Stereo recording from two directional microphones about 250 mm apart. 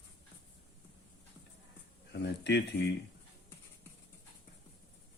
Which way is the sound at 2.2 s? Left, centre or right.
Left.